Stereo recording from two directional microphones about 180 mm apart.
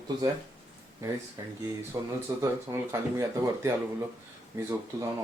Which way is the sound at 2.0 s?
15° right (ahead or behind).